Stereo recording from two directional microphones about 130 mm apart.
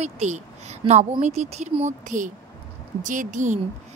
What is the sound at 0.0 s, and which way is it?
A woman's voice, 60° right (ahead or behind).